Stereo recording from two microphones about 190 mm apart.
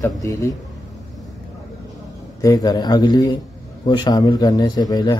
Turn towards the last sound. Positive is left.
turn(degrees=20)  # may be behind; listen again after turning